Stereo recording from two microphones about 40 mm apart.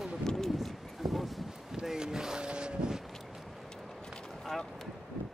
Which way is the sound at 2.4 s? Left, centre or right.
Right.